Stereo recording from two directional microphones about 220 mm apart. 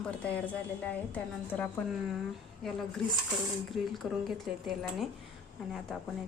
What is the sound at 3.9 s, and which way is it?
Speech, centre (ahead or behind).